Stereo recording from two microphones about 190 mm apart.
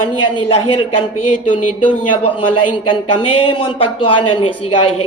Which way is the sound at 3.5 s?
25° left (ahead or behind).